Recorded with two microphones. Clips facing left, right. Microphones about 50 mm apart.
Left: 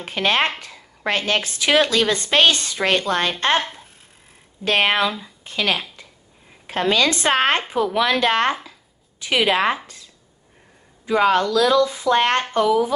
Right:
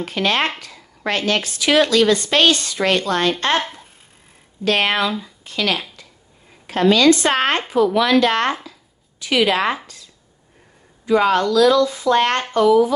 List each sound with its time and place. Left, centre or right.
0.0 s speech: left
3.5 s speech: centre
4.6 s speech: centre
11.1 s speech: centre